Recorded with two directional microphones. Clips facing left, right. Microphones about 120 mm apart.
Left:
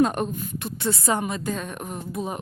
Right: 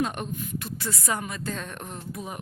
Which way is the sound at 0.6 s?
25° left (ahead or behind).